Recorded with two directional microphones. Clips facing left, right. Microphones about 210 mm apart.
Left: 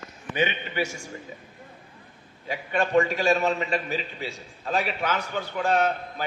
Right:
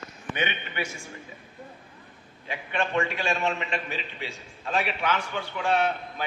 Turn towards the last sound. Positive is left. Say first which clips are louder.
# left 2 dB
turn(degrees=40)  # may be behind; listen again after turning